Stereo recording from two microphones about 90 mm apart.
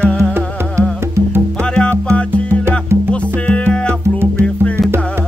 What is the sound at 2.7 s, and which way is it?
Music, 25° right (ahead or behind).